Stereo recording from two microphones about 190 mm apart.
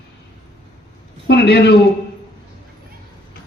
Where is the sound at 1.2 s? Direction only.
65° left (ahead or behind).